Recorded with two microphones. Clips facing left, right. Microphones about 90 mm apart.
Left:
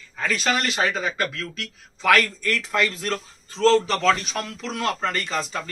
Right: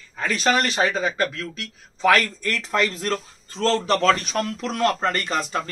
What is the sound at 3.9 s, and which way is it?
Speech, 50° right (ahead or behind).